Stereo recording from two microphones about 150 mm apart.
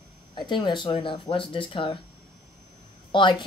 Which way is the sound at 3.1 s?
30° left (ahead or behind).